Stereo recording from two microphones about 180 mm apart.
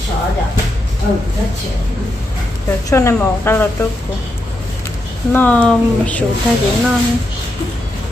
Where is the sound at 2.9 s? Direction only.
20° left (ahead or behind).